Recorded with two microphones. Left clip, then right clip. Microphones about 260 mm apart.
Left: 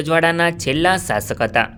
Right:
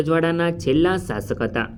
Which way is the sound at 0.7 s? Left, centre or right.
Left.